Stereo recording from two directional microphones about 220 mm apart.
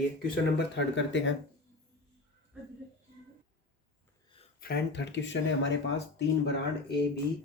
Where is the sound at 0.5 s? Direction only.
55° left (ahead or behind).